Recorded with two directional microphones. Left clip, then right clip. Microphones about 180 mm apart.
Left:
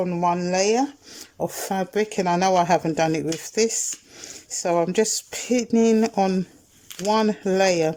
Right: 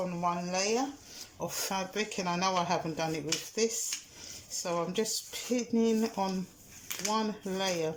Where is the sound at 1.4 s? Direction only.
45° left (ahead or behind).